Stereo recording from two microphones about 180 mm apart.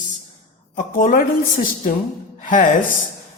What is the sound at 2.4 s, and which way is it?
Speech, 45° left (ahead or behind).